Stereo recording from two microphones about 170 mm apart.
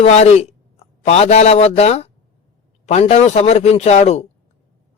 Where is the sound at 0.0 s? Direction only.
40° left (ahead or behind).